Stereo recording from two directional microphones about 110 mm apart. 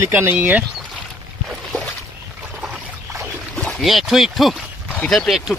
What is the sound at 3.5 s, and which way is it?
Speech, 5° left (ahead or behind).